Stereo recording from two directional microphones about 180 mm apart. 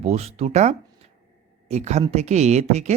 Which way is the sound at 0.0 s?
35° right (ahead or behind).